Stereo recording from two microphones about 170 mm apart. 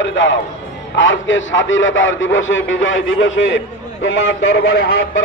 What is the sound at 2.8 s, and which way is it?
A man's voice, 90° left.